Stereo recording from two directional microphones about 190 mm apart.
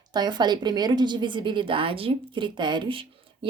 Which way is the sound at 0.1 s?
25° right (ahead or behind).